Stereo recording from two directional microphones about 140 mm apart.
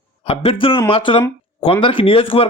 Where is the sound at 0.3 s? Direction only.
40° left (ahead or behind).